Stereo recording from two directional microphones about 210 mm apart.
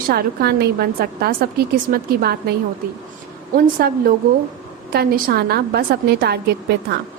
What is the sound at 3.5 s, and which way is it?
Speech, 45° right (ahead or behind).